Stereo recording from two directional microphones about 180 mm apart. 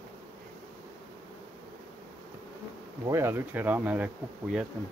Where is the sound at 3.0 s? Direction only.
15° right (ahead or behind).